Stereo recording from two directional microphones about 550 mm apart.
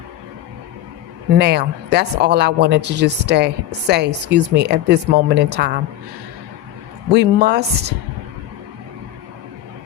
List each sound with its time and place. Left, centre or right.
1.4 s speech: centre
7.1 s speech: centre